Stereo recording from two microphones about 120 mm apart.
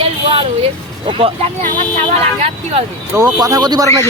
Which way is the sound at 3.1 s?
30° right (ahead or behind).